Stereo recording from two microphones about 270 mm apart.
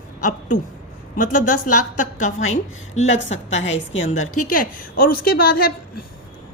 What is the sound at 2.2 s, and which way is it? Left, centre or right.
A woman's voice, left.